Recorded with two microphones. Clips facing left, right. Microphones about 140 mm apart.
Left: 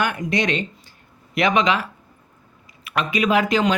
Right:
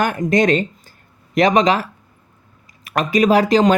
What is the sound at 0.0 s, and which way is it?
Speech, 40° right (ahead or behind).